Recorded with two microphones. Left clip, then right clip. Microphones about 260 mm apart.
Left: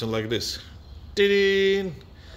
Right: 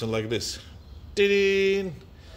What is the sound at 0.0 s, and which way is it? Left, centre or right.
Speech, centre.